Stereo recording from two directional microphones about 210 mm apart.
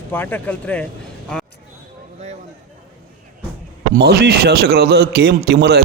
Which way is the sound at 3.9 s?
50° right (ahead or behind).